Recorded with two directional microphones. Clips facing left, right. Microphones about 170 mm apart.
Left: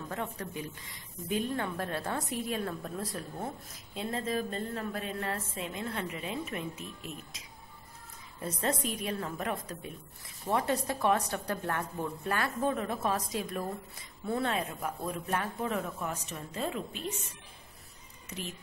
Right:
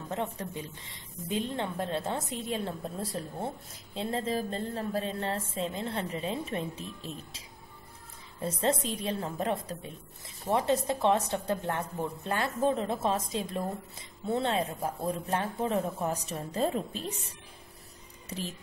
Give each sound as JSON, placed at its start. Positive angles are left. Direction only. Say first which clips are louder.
{"t": 0.1, "sound": "a woman's voice", "louder": "right 5 dB", "side_deg": -25}